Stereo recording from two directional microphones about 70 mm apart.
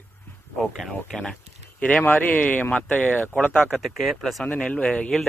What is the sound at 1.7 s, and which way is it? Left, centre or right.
Speech, left.